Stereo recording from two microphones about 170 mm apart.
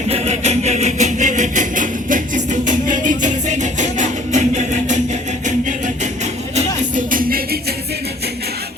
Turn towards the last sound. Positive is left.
turn(degrees=-55)  # may be behind; listen again after turning